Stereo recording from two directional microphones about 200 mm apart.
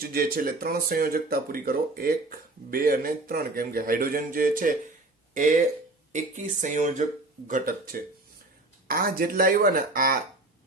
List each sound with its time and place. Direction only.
0.0 s speech: 45° right (ahead or behind)
6.1 s speech: 40° right (ahead or behind)